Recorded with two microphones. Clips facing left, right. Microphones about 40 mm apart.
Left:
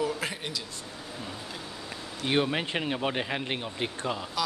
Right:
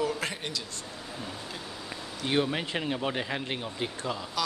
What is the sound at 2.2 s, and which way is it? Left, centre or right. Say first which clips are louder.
Speech: left 1 dB; left.